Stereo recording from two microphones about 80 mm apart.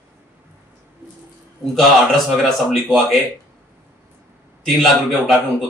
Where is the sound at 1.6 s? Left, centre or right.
Centre.